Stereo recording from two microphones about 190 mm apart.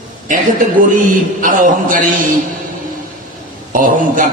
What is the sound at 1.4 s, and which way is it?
Speech, 45° right (ahead or behind).